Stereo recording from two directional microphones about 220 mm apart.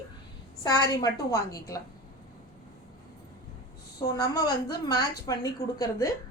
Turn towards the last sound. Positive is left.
turn(degrees=15)  # may be behind; listen again after turning